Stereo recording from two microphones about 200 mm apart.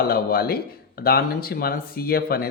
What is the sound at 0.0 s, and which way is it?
Speech, 50° left (ahead or behind).